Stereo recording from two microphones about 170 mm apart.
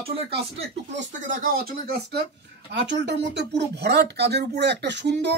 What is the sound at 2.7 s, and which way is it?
Speech, 90° right.